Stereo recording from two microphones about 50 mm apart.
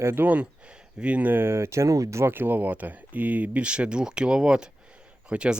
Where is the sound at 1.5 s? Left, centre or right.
Right.